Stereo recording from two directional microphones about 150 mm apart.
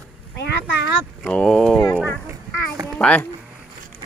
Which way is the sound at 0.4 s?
90° left.